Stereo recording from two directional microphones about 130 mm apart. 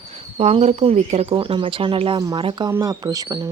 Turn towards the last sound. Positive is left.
turn(degrees=-30)  # may be behind; listen again after turning